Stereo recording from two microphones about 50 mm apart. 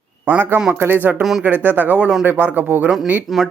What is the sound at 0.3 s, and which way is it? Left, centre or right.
Speech, right.